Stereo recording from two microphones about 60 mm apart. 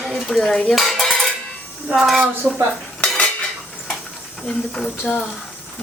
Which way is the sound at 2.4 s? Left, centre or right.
Centre.